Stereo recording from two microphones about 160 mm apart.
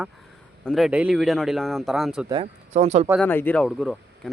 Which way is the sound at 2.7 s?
45° right (ahead or behind).